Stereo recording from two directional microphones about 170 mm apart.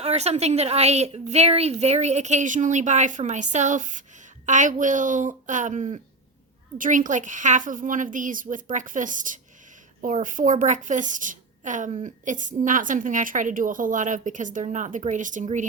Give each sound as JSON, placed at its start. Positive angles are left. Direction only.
{"t": 0.0, "sound": "a woman's voice", "side_deg": -40}